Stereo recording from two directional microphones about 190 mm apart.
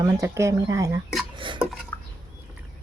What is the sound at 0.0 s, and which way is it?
Speech, 15° right (ahead or behind).